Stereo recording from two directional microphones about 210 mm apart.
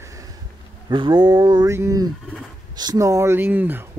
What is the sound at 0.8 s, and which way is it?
Speech, 20° right (ahead or behind).